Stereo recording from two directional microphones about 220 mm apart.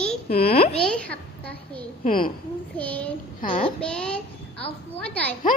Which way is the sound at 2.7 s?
5° left (ahead or behind).